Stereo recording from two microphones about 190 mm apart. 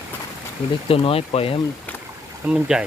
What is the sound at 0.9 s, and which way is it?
Speech, 30° left (ahead or behind).